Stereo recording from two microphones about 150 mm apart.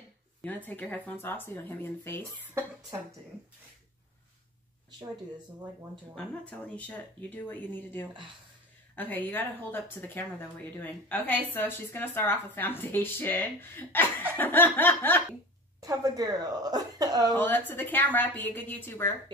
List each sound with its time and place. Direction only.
0.4 s a woman's voice: 10° left (ahead or behind)
6.1 s a woman's voice: 10° left (ahead or behind)
15.8 s speech: 25° right (ahead or behind)
17.3 s a woman's voice: 15° left (ahead or behind)